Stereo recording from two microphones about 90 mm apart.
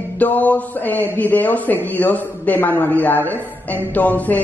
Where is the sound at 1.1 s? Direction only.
20° left (ahead or behind).